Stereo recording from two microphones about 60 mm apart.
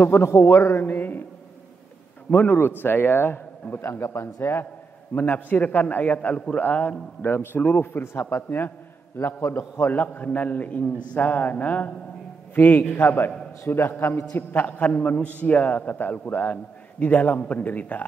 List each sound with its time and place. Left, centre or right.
0.1 s a man's voice: left
0.8 s a man's voice: left
2.3 s a man's voice: left
5.1 s a man's voice: left
8.5 s a man's voice: left
9.2 s a man's voice: left
14.3 s a man's voice: left